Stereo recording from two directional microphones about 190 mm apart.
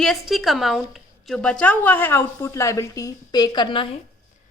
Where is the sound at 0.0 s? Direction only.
Centre (ahead or behind); by 3.9 s 25° left (ahead or behind).